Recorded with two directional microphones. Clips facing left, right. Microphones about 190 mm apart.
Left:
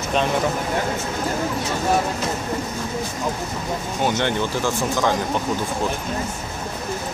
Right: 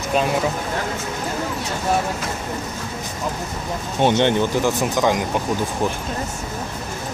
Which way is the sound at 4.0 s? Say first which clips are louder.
Right 6 dB; 20° right (ahead or behind).